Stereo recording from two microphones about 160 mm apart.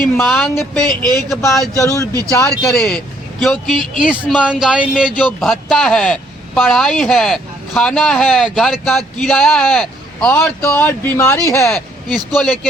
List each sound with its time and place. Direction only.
0.0 s a man's voice: centre (ahead or behind)
0.9 s speech: 25° right (ahead or behind)
1.5 s a man's voice: centre (ahead or behind)
1.7 s speech: 20° left (ahead or behind)
2.5 s a man's voice: centre (ahead or behind)
10.3 s speech: 15° left (ahead or behind)
11.7 s speech: 5° left (ahead or behind)